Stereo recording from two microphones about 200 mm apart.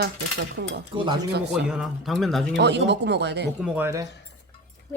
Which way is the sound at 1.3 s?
55° right (ahead or behind).